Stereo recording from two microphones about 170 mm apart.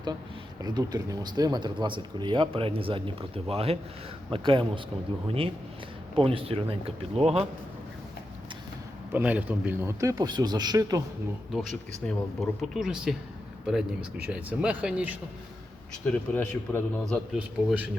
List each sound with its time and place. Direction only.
0.6 s speech: 25° right (ahead or behind)
6.1 s speech: 35° right (ahead or behind)
9.1 s speech: 10° right (ahead or behind)
10.0 s speech: 20° right (ahead or behind)
12.0 s a man's voice: centre (ahead or behind)
16.1 s a man's voice: 10° left (ahead or behind)